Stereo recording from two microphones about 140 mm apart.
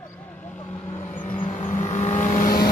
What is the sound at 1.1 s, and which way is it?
Vehicle, 65° left (ahead or behind).